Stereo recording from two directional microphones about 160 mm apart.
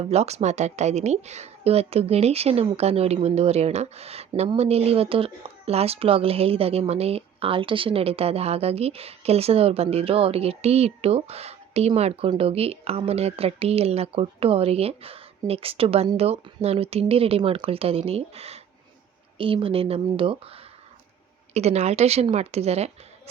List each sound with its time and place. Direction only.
0.0 s speech: 40° right (ahead or behind)